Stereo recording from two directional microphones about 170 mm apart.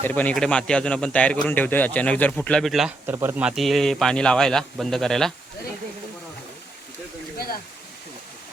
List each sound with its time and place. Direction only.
0.0 s a man's voice: 10° left (ahead or behind)
3.1 s speech: 10° right (ahead or behind)
7.3 s a sound: 60° left (ahead or behind)